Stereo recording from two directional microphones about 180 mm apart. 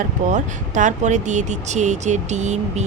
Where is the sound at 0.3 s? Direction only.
45° right (ahead or behind).